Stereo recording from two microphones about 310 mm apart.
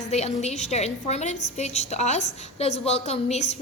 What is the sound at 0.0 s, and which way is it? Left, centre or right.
A woman's voice, left.